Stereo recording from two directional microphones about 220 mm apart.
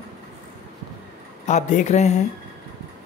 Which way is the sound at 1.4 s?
35° left (ahead or behind).